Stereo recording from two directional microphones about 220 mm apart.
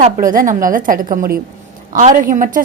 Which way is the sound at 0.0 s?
40° right (ahead or behind).